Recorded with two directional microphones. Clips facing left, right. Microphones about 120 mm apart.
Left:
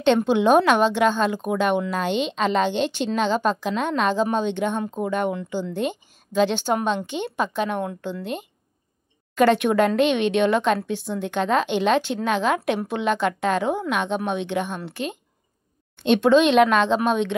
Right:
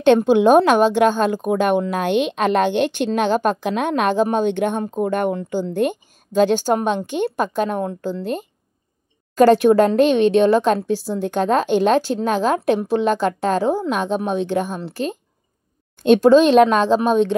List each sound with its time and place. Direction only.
0.0 s a woman's voice: 45° right (ahead or behind)